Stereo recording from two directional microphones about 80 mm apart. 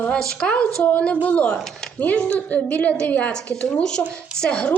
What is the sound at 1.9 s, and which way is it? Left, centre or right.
A woman's voice, centre.